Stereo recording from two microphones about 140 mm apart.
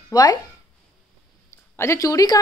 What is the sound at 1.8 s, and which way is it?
Speech, 20° left (ahead or behind).